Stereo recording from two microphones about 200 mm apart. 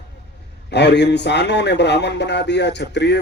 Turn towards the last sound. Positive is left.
turn(degrees=60)  # may be behind; listen again after turning